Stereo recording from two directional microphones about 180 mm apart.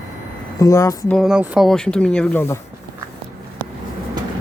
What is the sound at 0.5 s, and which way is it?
Speech, 15° left (ahead or behind).